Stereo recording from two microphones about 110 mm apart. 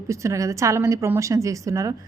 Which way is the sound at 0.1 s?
25° right (ahead or behind).